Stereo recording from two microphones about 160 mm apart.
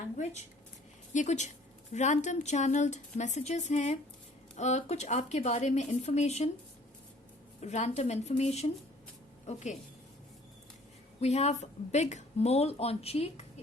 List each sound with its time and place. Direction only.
1.1 s speech: 50° left (ahead or behind)
7.6 s speech: 45° left (ahead or behind)
11.2 s a woman's voice: 45° left (ahead or behind)